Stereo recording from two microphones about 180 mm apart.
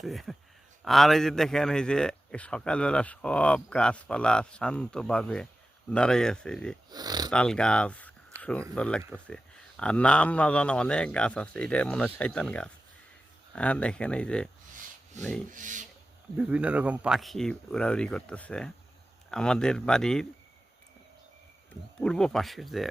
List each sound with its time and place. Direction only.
0.0 s a man's voice: centre (ahead or behind)
6.9 s speech: 20° right (ahead or behind)
7.3 s a man's voice: 5° left (ahead or behind)
8.4 s a sound: 5° left (ahead or behind)
8.7 s a man's voice: 5° left (ahead or behind)
15.5 s speech: 45° right (ahead or behind)
16.4 s a man's voice: 5° right (ahead or behind)
22.0 s a man's voice: 5° left (ahead or behind)